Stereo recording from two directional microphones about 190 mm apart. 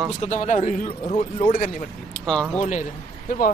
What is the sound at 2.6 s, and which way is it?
Speech, 40° left (ahead or behind).